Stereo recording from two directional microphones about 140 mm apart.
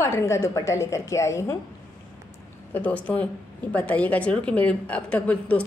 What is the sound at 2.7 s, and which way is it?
A woman's voice, 10° left (ahead or behind).